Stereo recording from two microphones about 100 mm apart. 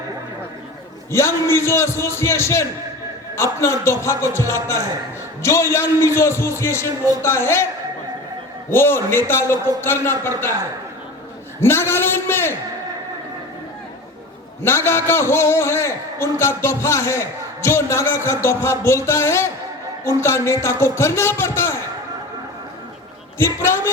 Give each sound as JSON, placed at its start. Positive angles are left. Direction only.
{"t": 1.1, "sound": "a man's voice", "side_deg": 25}
{"t": 8.7, "sound": "a man's voice", "side_deg": 25}
{"t": 11.6, "sound": "a man's voice", "side_deg": 25}
{"t": 14.6, "sound": "a man's voice", "side_deg": 25}
{"t": 23.4, "sound": "a man's voice", "side_deg": 25}